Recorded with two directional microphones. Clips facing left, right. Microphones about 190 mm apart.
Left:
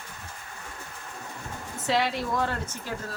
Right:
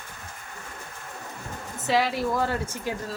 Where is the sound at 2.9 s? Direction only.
15° right (ahead or behind).